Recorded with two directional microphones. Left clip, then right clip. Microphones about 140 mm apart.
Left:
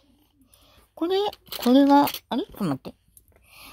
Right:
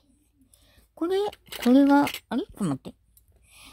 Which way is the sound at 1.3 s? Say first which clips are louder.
Left 1 dB; 90° right.